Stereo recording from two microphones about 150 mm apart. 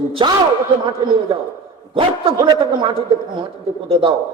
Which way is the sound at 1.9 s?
35° right (ahead or behind).